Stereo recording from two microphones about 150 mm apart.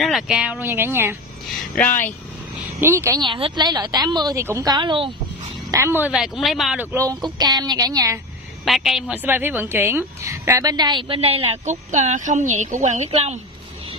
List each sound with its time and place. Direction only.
0.0 s speech: centre (ahead or behind)
0.6 s speech: 15° right (ahead or behind)
1.8 s speech: 15° left (ahead or behind)
2.8 s speech: 20° right (ahead or behind)
3.2 s a woman's voice: 35° right (ahead or behind)
4.6 s speech: 30° right (ahead or behind)
5.7 s speech: 20° right (ahead or behind)
6.1 s speech: 5° right (ahead or behind)
6.8 s speech: 15° right (ahead or behind)
7.1 s a woman's voice: 25° right (ahead or behind)
8.6 s a woman's voice: centre (ahead or behind); by 13.4 s 50° right (ahead or behind)